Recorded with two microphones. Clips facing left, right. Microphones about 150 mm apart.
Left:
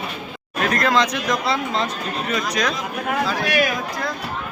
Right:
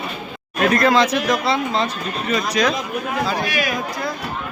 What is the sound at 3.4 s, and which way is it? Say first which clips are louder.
Speech: left 3 dB; 60° left (ahead or behind).